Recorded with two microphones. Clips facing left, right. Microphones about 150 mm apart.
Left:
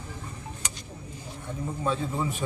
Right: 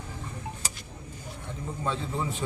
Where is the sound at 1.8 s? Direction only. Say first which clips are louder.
Left 2 dB; 15° left (ahead or behind).